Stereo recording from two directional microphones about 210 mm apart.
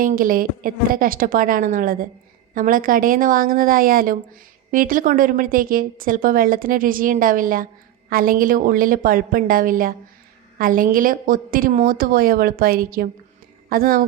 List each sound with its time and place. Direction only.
0.0 s a woman's voice: 40° right (ahead or behind)